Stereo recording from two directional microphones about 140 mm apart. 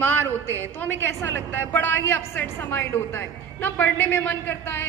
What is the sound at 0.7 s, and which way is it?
A woman's voice, 15° left (ahead or behind).